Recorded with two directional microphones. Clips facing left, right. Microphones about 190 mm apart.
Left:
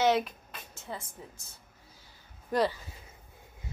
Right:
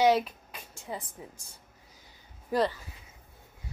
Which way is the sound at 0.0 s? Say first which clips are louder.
Right 2 dB; 10° right (ahead or behind).